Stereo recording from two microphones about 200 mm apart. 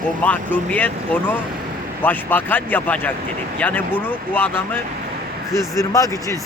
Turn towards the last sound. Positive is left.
turn(degrees=15)  # may be behind; listen again after turning